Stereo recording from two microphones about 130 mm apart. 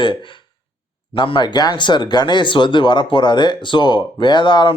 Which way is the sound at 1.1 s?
40° left (ahead or behind).